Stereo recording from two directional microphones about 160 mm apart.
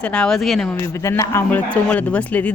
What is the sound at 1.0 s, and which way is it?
Speech, 20° left (ahead or behind).